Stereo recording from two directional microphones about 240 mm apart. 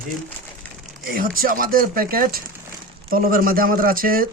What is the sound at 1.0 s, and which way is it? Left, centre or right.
Speech, right.